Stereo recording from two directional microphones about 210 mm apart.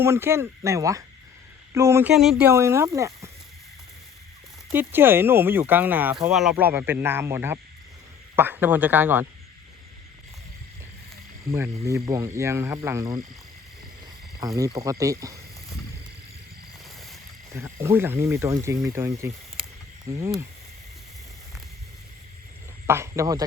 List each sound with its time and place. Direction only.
0.0 s speech: 10° right (ahead or behind)
4.7 s speech: 10° right (ahead or behind)
11.5 s speech: 15° right (ahead or behind)
14.3 s speech: 15° right (ahead or behind)
17.5 s speech: 15° right (ahead or behind)
22.9 s speech: 15° right (ahead or behind)